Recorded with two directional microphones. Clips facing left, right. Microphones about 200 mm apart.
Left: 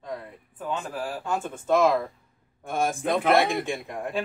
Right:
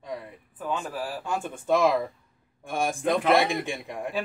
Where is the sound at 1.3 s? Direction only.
15° right (ahead or behind).